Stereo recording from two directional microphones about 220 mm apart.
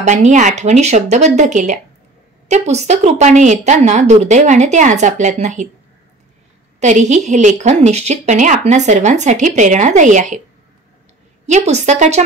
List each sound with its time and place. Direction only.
0.0 s a woman's voice: 30° right (ahead or behind)
6.8 s a woman's voice: 35° right (ahead or behind)
11.4 s a woman's voice: 30° right (ahead or behind)